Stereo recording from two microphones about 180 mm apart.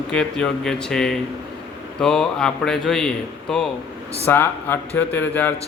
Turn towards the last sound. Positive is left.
turn(degrees=10)  # may be behind; listen again after turning